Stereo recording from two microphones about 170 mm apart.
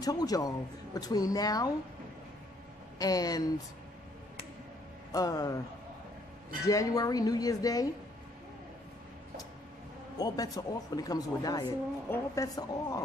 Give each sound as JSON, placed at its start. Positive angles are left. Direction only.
{"t": 0.0, "sound": "speech", "side_deg": 20}
{"t": 3.0, "sound": "speech", "side_deg": 20}
{"t": 5.1, "sound": "speech", "side_deg": 20}
{"t": 6.6, "sound": "speech", "side_deg": 20}
{"t": 10.1, "sound": "speech", "side_deg": 20}